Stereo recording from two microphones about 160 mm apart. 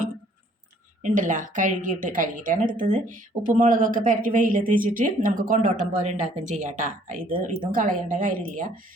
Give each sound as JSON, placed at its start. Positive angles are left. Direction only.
{"t": 1.0, "sound": "a woman's voice", "side_deg": -55}